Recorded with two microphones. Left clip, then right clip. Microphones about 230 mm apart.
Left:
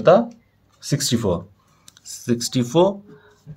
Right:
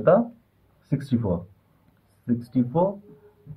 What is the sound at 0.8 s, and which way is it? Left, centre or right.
Speech, left.